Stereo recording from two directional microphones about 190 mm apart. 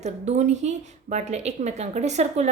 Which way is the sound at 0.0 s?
40° right (ahead or behind).